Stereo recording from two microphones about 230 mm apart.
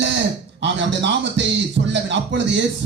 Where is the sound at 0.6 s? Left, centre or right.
Right.